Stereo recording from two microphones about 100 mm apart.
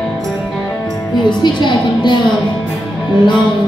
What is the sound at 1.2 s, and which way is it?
Music, 50° left (ahead or behind).